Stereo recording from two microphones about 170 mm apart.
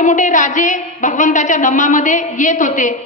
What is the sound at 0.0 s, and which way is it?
A woman's voice, 50° left (ahead or behind).